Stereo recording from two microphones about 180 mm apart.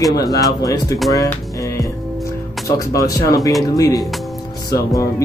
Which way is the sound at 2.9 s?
20° left (ahead or behind).